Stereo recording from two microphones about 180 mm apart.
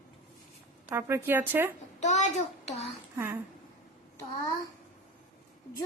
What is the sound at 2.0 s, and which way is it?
Child singing, 40° left (ahead or behind).